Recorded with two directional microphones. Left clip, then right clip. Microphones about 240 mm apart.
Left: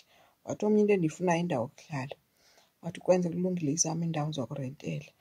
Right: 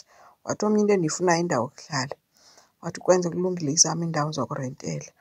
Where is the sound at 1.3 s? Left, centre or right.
Centre.